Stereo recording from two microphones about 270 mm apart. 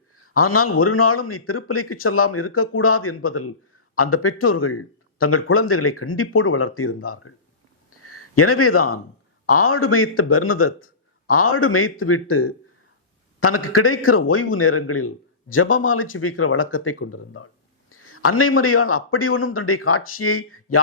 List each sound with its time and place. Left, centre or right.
0.3 s speech: left
7.9 s a sound: left
9.5 s speech: left